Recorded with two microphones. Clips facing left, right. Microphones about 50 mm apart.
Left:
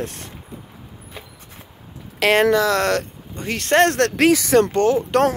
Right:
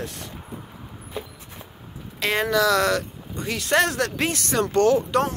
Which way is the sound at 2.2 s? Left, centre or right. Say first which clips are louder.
Left 8 dB; left.